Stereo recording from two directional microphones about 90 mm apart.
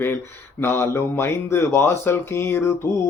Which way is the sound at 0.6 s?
30° left (ahead or behind).